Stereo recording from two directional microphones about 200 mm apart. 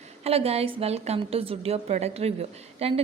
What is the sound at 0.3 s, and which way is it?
A woman's voice, 30° right (ahead or behind).